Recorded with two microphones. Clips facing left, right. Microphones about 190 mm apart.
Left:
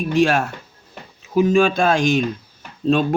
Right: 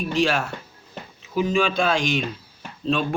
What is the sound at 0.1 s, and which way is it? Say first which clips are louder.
Speech: left 6 dB; 50° left (ahead or behind).